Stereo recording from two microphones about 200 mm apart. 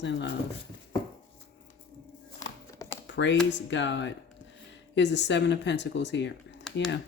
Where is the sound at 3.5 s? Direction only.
65° left (ahead or behind).